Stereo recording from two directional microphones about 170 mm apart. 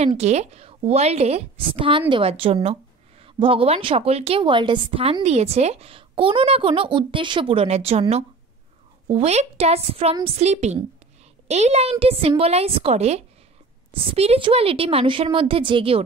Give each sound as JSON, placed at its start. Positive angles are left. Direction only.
{"t": 0.2, "sound": "a woman's voice", "side_deg": -40}